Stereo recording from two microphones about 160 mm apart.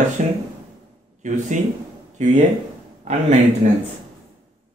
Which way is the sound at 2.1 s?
45° right (ahead or behind).